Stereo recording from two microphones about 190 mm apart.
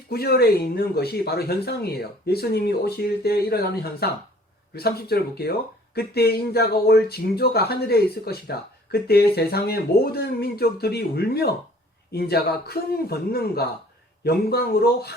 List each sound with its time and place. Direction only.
0.1 s speech: 55° left (ahead or behind)